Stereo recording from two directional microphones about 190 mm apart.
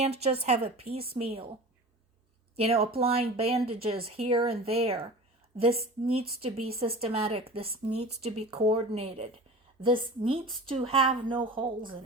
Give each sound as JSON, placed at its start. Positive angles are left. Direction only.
{"t": 0.0, "sound": "speech", "side_deg": -35}
{"t": 2.6, "sound": "a woman's voice", "side_deg": -30}